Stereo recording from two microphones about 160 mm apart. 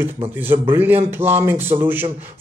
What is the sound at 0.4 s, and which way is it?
Speech, 15° right (ahead or behind).